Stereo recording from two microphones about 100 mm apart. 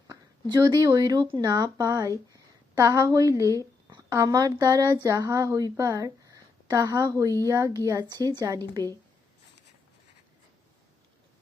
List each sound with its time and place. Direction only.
0.1 s a woman's voice: 45° right (ahead or behind)